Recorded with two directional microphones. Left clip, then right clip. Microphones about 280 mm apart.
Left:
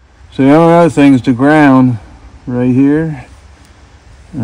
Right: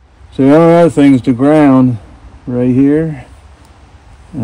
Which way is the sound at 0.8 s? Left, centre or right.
Left.